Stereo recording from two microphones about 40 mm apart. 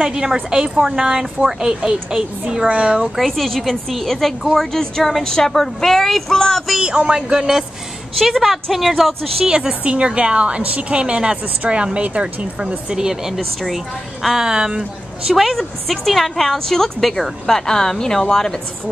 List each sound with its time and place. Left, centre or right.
0.0 s a woman's voice: centre
3.2 s a woman's voice: centre
6.8 s a woman's voice: right; by 9.3 s centre
9.7 s a woman's voice: right
12.9 s a woman's voice: centre
13.4 s a woman's voice: centre
14.2 s a woman's voice: centre
15.2 s a woman's voice: centre